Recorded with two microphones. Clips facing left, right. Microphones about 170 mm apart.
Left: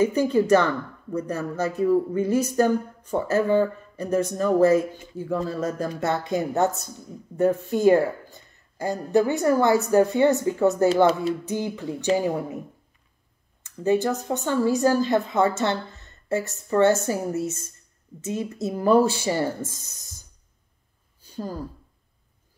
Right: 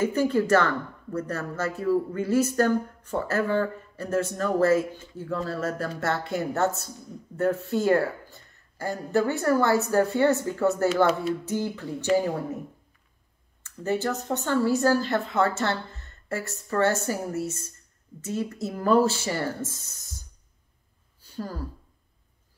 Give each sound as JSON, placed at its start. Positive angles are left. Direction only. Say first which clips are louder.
{"t": 0.0, "sound": "speech", "louder": "left 3 dB", "side_deg": 15}
{"t": 13.6, "sound": "a woman's voice", "louder": "left 6 dB", "side_deg": 15}
{"t": 21.2, "sound": "a sound", "louder": "left 2 dB", "side_deg": 15}